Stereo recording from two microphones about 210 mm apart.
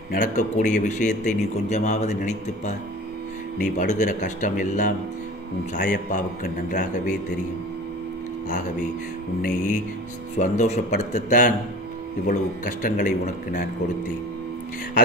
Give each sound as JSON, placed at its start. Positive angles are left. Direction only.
{"t": 0.1, "sound": "speech", "side_deg": 40}
{"t": 10.3, "sound": "speech", "side_deg": 35}